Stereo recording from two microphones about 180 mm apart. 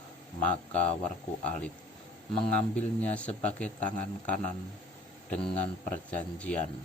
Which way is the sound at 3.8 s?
40° left (ahead or behind).